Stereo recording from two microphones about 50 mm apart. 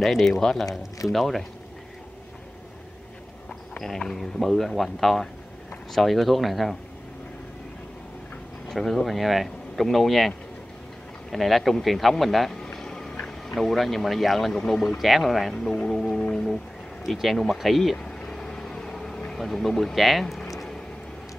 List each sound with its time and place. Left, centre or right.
0.0 s speech: centre
3.7 s speech: centre
8.6 s speech: centre
12.7 s vehicle: centre
13.1 s a sound: left
13.6 s speech: centre
15.9 s music: centre
17.0 s speech: centre
17.9 s vehicle: centre
19.4 s speech: centre
20.4 s a sound: centre